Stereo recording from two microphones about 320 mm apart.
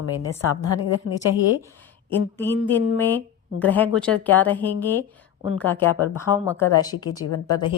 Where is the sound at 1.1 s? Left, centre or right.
Left.